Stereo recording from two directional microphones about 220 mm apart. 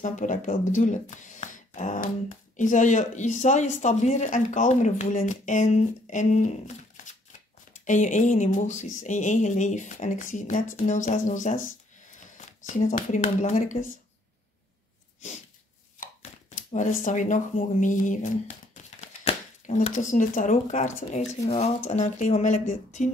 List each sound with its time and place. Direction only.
0.0 s speech: 35° left (ahead or behind)
7.8 s speech: 35° left (ahead or behind)
16.2 s speech: 35° left (ahead or behind)